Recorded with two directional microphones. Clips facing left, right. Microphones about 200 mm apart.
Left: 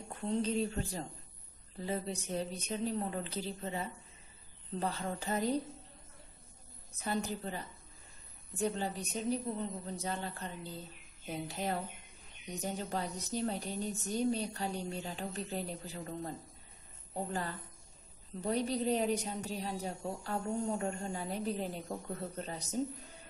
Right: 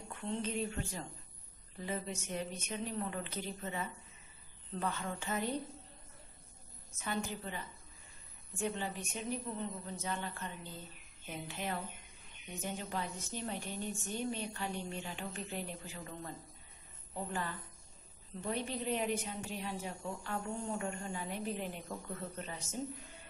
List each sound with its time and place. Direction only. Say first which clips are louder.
0.1 s a woman's voice: left 5 dB; 40° left (ahead or behind)
7.0 s a woman's voice: left 3 dB; 35° left (ahead or behind)